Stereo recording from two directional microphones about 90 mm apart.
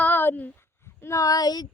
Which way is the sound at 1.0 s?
35° left (ahead or behind).